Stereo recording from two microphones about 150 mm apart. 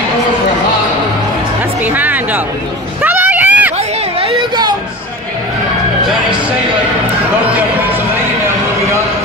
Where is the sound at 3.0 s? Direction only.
10° right (ahead or behind).